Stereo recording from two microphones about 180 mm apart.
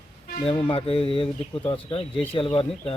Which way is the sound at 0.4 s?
30° left (ahead or behind).